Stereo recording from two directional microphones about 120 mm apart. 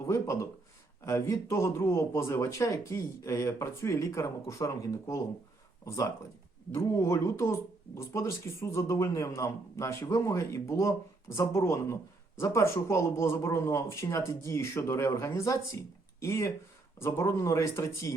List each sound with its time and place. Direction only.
0.0 s speech: 25° left (ahead or behind)
6.7 s speech: 25° left (ahead or behind)